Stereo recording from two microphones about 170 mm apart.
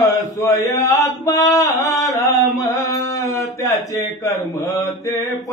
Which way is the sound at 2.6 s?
20° left (ahead or behind).